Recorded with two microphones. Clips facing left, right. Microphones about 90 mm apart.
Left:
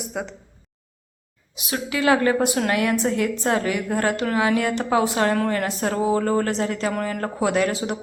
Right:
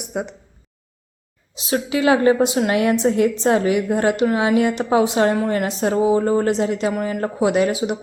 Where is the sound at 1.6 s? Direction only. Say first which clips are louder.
Right 4 dB; 25° right (ahead or behind).